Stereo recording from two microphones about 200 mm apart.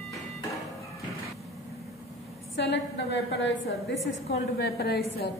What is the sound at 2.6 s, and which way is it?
A woman's voice, 60° left (ahead or behind).